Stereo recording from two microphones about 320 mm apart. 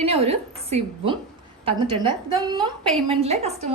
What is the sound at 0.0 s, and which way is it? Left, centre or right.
A woman's voice, centre.